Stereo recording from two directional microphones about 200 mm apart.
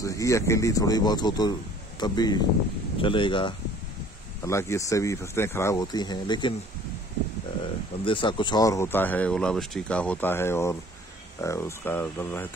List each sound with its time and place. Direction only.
0.0 s speech: 15° left (ahead or behind)
4.5 s speech: 15° left (ahead or behind)
8.0 s speech: 25° left (ahead or behind); by 12.4 s 10° left (ahead or behind)